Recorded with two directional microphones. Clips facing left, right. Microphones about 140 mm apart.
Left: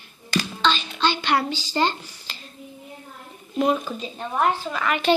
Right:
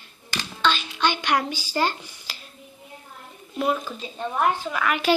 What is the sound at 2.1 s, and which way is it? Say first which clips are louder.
Finger snapping: left 1 dB; 10° right (ahead or behind).